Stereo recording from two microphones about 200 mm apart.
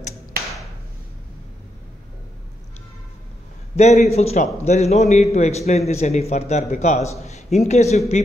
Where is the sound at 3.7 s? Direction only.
35° left (ahead or behind).